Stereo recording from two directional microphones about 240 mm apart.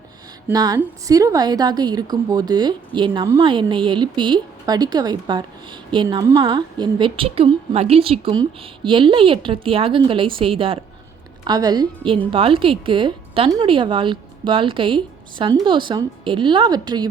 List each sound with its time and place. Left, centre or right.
0.4 s a woman's voice: centre